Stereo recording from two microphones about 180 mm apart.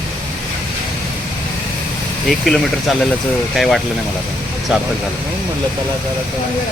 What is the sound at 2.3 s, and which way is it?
Speech, centre (ahead or behind).